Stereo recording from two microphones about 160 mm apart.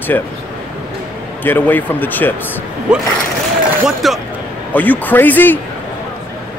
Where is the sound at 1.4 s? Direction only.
10° left (ahead or behind).